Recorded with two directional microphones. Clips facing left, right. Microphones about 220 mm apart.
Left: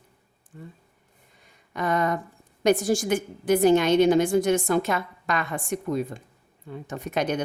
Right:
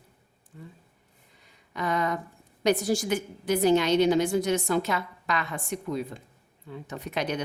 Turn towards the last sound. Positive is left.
turn(degrees=50)  # may be behind; listen again after turning